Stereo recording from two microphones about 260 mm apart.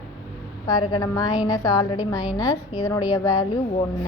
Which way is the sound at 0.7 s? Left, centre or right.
Centre.